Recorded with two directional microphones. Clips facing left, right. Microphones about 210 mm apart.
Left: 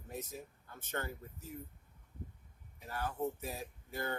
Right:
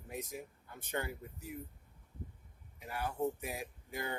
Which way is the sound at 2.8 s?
15° right (ahead or behind).